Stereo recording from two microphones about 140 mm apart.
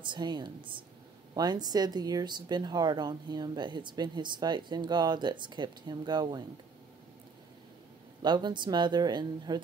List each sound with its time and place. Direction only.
0.0 s speech: 35° right (ahead or behind)
8.2 s speech: 30° right (ahead or behind)